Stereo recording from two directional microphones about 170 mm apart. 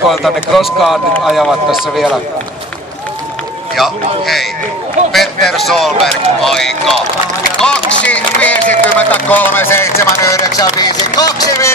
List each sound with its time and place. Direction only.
0.1 s speech: centre (ahead or behind)
3.7 s speech: centre (ahead or behind); by 11.7 s 20° left (ahead or behind)